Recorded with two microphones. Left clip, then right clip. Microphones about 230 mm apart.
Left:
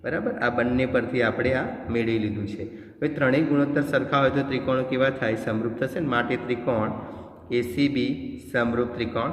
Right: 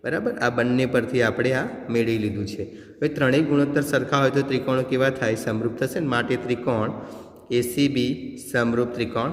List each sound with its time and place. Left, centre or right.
0.0 s a man's voice: right